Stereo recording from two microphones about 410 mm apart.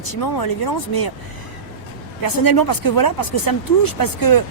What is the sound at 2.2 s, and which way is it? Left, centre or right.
Speech, left.